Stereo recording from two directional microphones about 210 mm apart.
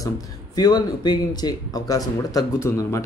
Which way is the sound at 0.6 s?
20° left (ahead or behind).